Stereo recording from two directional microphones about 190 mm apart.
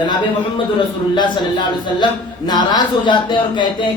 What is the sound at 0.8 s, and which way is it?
A man's voice, 25° left (ahead or behind).